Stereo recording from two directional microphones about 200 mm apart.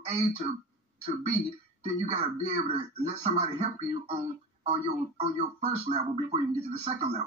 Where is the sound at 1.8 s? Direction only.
30° right (ahead or behind).